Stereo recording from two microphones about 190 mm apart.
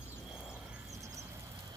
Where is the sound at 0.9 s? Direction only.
15° right (ahead or behind).